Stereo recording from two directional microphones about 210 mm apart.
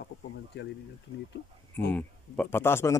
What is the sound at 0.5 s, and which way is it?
Speech, 55° left (ahead or behind).